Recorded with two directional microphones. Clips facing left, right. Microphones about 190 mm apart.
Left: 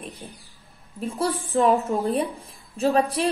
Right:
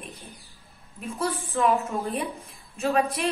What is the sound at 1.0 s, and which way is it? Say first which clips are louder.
A woman's voice: left 4 dB; 35° left (ahead or behind).